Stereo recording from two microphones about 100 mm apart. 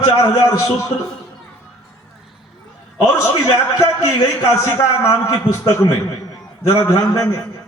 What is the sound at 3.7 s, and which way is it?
A man's voice, 30° left (ahead or behind).